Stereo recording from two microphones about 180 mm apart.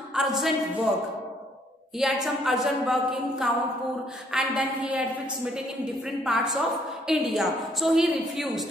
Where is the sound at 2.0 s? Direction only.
Centre (ahead or behind).